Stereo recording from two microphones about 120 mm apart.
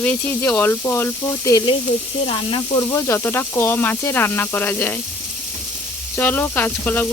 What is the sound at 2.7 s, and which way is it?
Speech, 20° left (ahead or behind).